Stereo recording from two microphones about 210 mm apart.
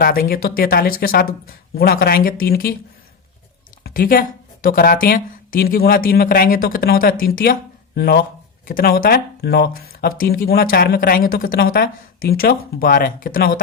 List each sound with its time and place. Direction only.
0.0 s speech: 45° left (ahead or behind)
3.8 s speech: 45° left (ahead or behind)